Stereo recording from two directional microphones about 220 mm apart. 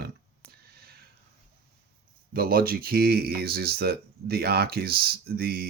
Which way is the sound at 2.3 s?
40° right (ahead or behind).